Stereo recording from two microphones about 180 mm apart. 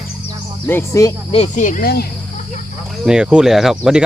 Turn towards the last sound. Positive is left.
turn(degrees=-5)  # may be behind; listen again after turning